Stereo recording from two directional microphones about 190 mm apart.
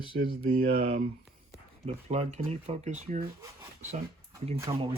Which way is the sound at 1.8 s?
35° right (ahead or behind).